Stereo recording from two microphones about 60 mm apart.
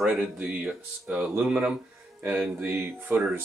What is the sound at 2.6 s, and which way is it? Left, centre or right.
Speech, right.